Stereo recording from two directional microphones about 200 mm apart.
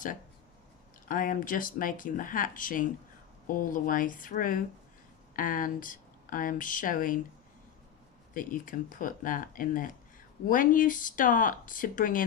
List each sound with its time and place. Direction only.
1.0 s speech: 45° left (ahead or behind)
8.3 s speech: 40° left (ahead or behind)